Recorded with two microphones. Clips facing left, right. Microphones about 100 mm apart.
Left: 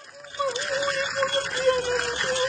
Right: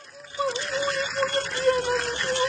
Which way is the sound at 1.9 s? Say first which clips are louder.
Even; 55° left (ahead or behind).